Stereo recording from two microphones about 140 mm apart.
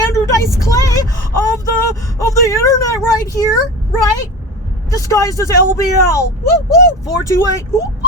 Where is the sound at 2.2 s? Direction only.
25° left (ahead or behind).